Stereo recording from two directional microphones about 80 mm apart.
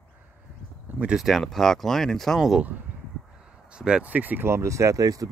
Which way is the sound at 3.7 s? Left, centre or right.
Centre.